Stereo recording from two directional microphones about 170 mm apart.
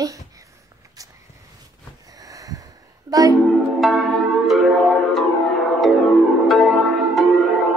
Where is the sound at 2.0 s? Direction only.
20° right (ahead or behind).